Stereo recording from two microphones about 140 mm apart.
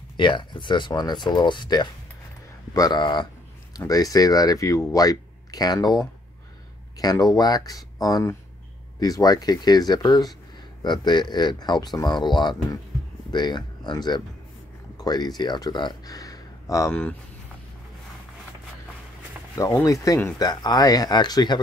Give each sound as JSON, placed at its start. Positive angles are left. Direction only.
{"t": 0.2, "sound": "speech", "side_deg": 35}
{"t": 16.9, "sound": "speech", "side_deg": 10}
{"t": 19.5, "sound": "speech", "side_deg": 25}